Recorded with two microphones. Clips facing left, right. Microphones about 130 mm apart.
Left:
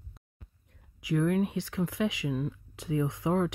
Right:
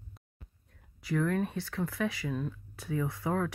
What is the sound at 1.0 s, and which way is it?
Speech, 15° left (ahead or behind).